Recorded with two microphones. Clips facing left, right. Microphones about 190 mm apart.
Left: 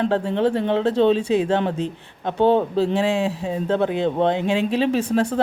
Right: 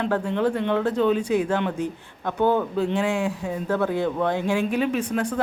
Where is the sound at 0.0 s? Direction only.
25° left (ahead or behind).